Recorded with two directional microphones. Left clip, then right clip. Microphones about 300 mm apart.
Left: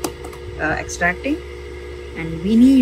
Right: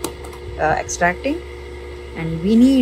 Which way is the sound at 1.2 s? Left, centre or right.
Right.